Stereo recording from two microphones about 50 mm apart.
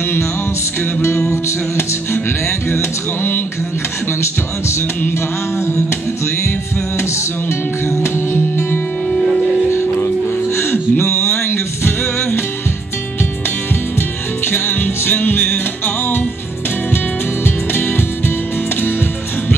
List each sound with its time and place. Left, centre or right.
2.7 s music: left
7.0 s music: left
9.7 s music: left
13.9 s music: left